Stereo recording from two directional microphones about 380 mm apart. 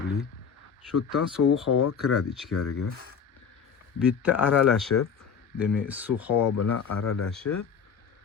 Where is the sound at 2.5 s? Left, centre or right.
Left.